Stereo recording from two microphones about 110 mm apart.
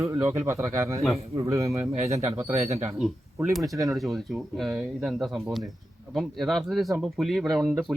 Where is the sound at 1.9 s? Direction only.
70° right (ahead or behind).